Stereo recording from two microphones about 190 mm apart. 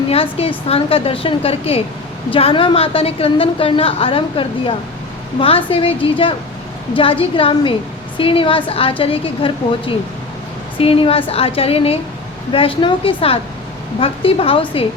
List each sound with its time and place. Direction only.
0.1 s a woman's voice: 30° left (ahead or behind)